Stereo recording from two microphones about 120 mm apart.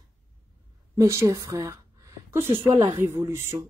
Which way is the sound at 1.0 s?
25° right (ahead or behind).